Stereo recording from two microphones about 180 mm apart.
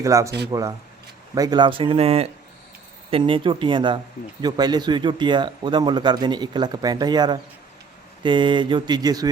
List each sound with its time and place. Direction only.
0.0 s speech: 15° right (ahead or behind)
1.4 s speech: 25° right (ahead or behind)